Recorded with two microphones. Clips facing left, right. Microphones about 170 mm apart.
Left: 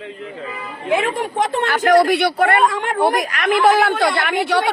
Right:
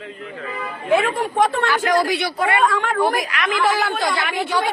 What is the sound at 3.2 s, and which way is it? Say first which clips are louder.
Speech: left 4 dB; 45° left (ahead or behind).